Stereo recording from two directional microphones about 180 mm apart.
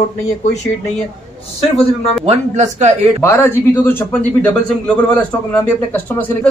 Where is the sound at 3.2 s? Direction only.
10° left (ahead or behind).